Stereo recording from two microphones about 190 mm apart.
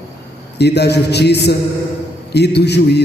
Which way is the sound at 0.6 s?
60° left (ahead or behind).